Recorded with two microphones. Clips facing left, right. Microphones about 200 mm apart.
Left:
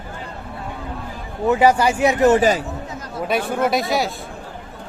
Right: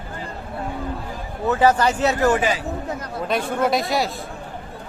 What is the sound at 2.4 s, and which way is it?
Speech, 45° left (ahead or behind).